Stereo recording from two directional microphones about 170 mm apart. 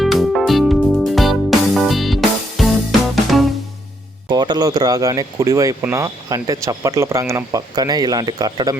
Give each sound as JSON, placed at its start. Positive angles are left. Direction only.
{"t": 0.0, "sound": "music", "side_deg": 0}
{"t": 4.3, "sound": "speech", "side_deg": -25}